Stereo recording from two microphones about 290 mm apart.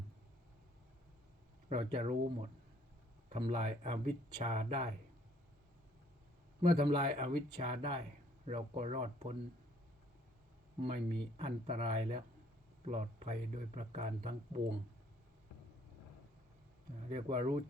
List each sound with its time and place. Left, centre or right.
1.7 s speech: centre
6.7 s speech: centre
10.8 s speech: centre
17.1 s speech: centre